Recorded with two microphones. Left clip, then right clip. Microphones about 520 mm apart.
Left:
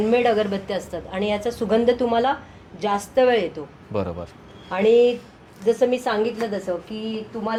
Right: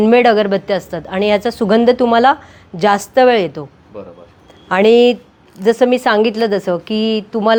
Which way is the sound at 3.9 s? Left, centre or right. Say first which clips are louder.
Left 5 dB; left.